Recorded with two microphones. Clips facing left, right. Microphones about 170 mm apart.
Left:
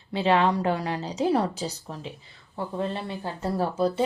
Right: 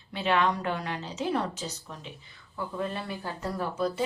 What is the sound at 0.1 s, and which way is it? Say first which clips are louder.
Speech: left 4 dB; 30° left (ahead or behind).